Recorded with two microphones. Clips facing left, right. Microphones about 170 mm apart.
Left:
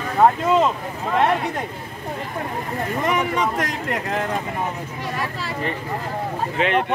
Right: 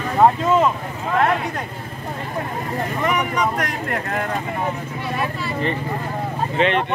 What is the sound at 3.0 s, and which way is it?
Speech, 25° left (ahead or behind).